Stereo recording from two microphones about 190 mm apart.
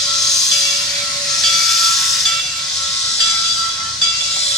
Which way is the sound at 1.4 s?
Centre (ahead or behind).